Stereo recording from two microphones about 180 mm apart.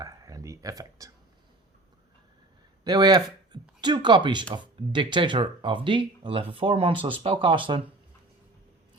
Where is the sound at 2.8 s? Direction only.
25° right (ahead or behind).